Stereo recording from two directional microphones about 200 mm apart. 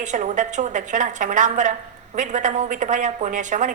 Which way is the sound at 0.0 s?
40° right (ahead or behind).